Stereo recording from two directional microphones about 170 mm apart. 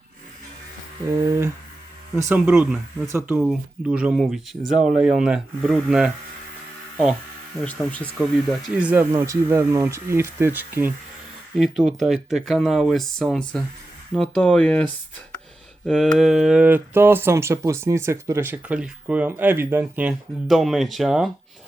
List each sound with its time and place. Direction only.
1.2 s speech: 15° right (ahead or behind)
2.3 s speech: 5° right (ahead or behind)
7.6 s speech: 5° left (ahead or behind)
8.2 s speech: 5° right (ahead or behind)
15.9 s speech: centre (ahead or behind)